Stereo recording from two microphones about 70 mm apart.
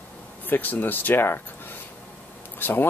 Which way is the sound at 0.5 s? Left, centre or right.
Left.